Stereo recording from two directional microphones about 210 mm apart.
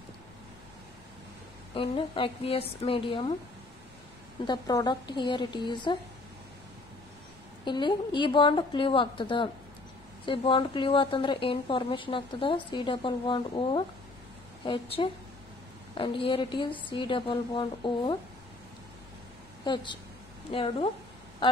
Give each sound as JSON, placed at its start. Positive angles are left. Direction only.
{"t": 1.7, "sound": "a woman's voice", "side_deg": 25}
{"t": 4.5, "sound": "a woman's voice", "side_deg": 20}
{"t": 7.6, "sound": "a woman's voice", "side_deg": 20}
{"t": 19.6, "sound": "a woman's voice", "side_deg": 20}